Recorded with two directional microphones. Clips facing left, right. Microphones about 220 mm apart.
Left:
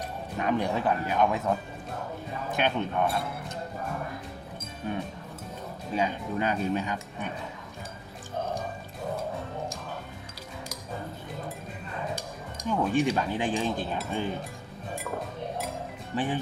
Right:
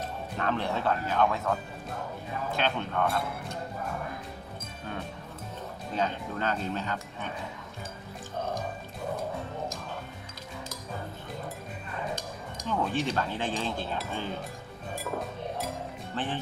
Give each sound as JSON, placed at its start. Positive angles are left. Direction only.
{"t": 0.3, "sound": "speech", "side_deg": 15}
{"t": 4.9, "sound": "speech", "side_deg": 15}
{"t": 12.6, "sound": "speech", "side_deg": 15}
{"t": 16.1, "sound": "speech", "side_deg": 15}